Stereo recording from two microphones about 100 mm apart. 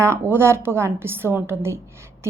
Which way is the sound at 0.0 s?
25° right (ahead or behind).